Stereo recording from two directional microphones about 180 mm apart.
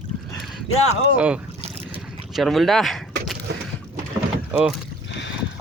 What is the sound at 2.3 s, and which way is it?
Speech, centre (ahead or behind).